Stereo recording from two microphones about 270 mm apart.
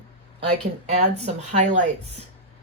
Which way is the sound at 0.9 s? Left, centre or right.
Right.